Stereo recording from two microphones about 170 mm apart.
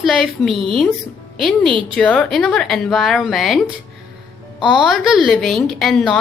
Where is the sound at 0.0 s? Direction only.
Centre (ahead or behind).